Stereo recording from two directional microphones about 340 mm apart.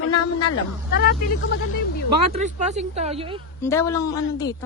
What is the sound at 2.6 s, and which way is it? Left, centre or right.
Speech, centre.